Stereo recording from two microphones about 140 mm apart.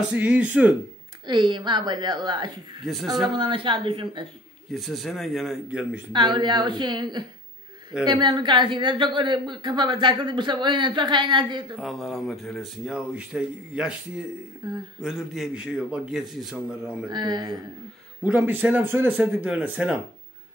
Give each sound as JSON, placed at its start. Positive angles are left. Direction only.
{"t": 0.1, "sound": "speech", "side_deg": -10}
{"t": 1.2, "sound": "speech", "side_deg": -35}
{"t": 4.7, "sound": "speech", "side_deg": 0}
{"t": 6.1, "sound": "speech", "side_deg": -35}
{"t": 11.8, "sound": "speech", "side_deg": 0}
{"t": 14.6, "sound": "speech", "side_deg": -30}
{"t": 15.0, "sound": "speech", "side_deg": -5}
{"t": 17.1, "sound": "speech", "side_deg": -30}
{"t": 18.2, "sound": "speech", "side_deg": -10}